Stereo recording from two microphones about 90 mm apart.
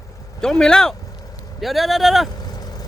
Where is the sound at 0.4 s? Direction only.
5° left (ahead or behind).